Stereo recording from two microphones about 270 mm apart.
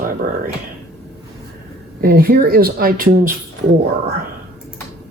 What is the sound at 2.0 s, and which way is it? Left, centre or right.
Speech, right.